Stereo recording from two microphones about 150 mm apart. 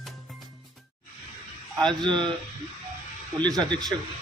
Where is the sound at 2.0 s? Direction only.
30° right (ahead or behind).